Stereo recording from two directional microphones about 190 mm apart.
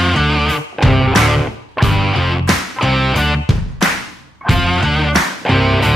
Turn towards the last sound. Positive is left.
turn(degrees=0)  # may be behind; listen again after turning